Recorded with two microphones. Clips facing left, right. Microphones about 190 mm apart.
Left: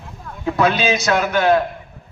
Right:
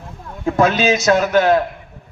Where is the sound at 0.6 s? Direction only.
45° right (ahead or behind).